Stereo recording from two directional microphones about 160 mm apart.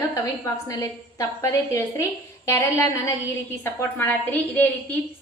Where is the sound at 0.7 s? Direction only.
20° left (ahead or behind).